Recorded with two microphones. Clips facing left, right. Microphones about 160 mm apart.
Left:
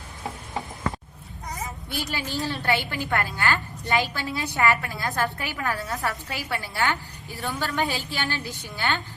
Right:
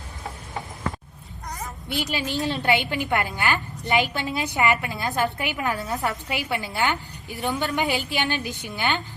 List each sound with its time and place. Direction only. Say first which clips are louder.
2.0 s a woman's voice: right 3 dB; 20° right (ahead or behind)